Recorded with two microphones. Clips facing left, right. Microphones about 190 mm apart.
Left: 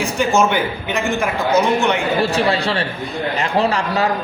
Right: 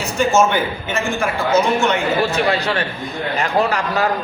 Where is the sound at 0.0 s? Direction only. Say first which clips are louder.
Right 1 dB; 15° left (ahead or behind).